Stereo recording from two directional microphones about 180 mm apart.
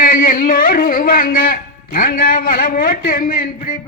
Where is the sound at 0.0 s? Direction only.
50° left (ahead or behind).